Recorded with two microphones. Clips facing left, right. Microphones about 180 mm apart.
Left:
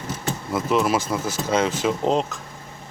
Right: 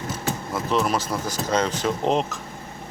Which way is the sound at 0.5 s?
5° left (ahead or behind).